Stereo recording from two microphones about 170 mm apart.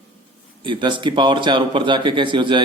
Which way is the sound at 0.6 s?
30° right (ahead or behind).